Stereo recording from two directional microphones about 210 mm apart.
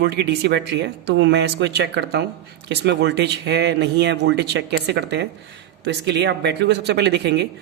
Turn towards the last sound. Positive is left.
turn(degrees=-55)  # may be behind; listen again after turning